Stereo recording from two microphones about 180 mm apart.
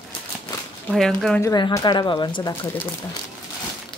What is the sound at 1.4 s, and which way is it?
Speech, 20° left (ahead or behind).